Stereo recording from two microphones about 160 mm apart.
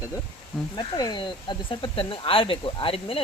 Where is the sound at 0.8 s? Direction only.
25° left (ahead or behind).